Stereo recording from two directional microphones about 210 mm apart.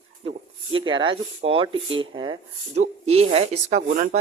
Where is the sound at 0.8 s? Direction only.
25° right (ahead or behind).